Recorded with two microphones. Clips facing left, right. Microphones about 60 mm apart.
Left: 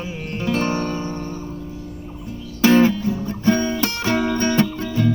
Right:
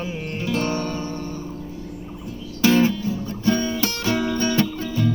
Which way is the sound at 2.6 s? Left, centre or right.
Left.